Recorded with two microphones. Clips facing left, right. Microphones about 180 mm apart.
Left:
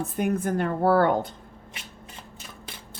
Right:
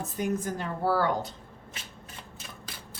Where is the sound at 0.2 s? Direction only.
60° left (ahead or behind).